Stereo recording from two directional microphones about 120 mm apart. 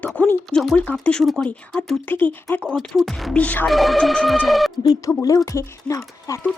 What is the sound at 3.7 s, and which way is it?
Speech, centre (ahead or behind).